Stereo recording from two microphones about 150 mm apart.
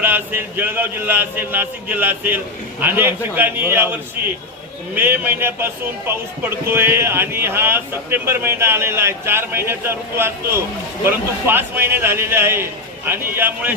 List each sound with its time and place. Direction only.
0.0 s speech: 15° right (ahead or behind)
4.9 s speech: 15° right (ahead or behind)